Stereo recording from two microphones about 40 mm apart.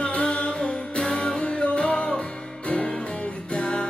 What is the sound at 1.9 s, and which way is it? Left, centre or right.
Music, centre.